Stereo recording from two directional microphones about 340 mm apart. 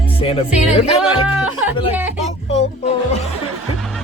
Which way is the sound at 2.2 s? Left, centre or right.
Centre.